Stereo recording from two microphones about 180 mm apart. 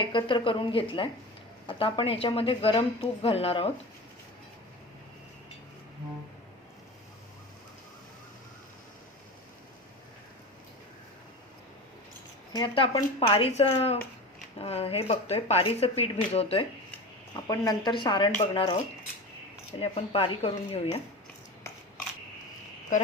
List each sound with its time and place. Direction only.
0.0 s a woman's voice: 25° left (ahead or behind)
12.5 s a woman's voice: 30° left (ahead or behind)
17.3 s a woman's voice: 20° left (ahead or behind)
19.8 s speech: 30° left (ahead or behind)